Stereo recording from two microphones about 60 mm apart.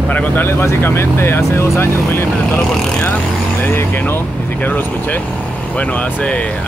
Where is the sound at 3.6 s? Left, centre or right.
Left; by 6.6 s centre.